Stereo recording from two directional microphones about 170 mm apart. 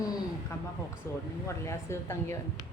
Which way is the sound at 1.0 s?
15° left (ahead or behind).